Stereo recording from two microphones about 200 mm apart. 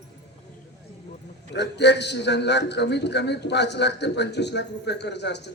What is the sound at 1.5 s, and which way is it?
A man's voice, 60° left (ahead or behind).